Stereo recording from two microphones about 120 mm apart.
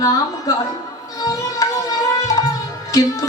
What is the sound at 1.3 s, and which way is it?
Music, 30° left (ahead or behind).